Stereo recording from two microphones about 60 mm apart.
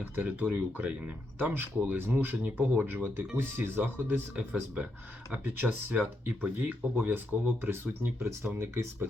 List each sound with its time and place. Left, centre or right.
0.0 s speech: right
4.4 s speech: right
5.3 s speech: right
5.6 s speech: right